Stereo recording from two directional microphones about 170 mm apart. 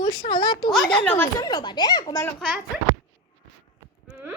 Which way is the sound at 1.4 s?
25° left (ahead or behind).